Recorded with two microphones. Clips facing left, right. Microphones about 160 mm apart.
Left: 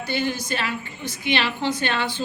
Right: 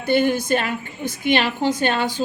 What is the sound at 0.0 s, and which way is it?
A woman's voice, 55° right (ahead or behind).